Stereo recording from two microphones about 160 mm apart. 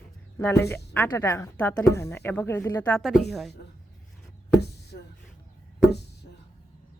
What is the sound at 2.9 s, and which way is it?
Speech, centre (ahead or behind).